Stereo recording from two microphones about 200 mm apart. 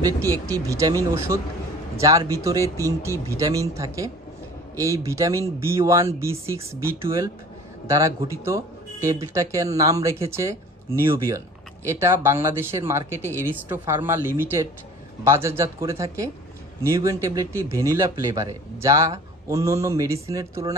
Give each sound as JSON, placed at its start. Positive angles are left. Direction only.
{"t": 0.0, "sound": "a man's voice", "side_deg": -15}